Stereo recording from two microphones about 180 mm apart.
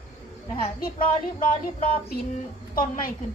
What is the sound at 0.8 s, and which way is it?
Speech, 50° left (ahead or behind).